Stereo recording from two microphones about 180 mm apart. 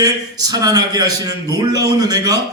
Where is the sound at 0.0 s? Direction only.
20° right (ahead or behind).